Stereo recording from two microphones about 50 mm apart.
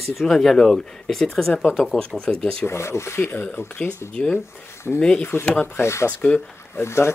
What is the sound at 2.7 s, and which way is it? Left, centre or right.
Speech, left.